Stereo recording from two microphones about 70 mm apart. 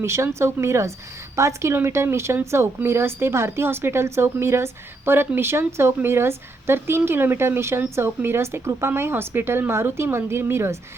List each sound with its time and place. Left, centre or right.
0.0 s speech: right